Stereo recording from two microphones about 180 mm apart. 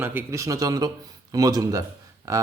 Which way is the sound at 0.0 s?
10° right (ahead or behind).